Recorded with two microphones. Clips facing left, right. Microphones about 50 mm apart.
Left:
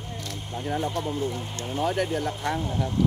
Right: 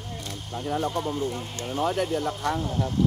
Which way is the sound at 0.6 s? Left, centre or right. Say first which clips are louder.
Right 1 dB; left.